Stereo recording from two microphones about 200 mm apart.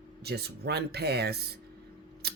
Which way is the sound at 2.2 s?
55° right (ahead or behind).